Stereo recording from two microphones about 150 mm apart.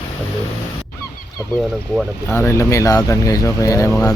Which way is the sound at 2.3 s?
15° left (ahead or behind).